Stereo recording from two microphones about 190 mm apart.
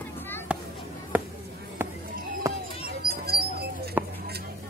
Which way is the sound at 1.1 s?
10° right (ahead or behind).